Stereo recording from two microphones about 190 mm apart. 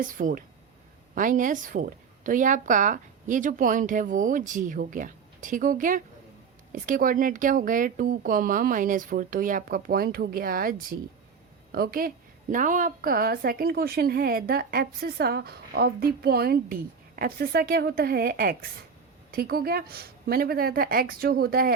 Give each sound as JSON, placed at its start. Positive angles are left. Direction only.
{"t": 0.0, "sound": "a woman's voice", "side_deg": -45}